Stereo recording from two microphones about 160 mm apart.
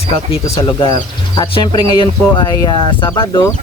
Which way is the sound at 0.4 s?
40° left (ahead or behind).